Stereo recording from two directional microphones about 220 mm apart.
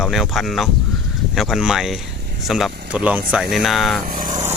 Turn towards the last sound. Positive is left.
turn(degrees=-40)  # may be behind; listen again after turning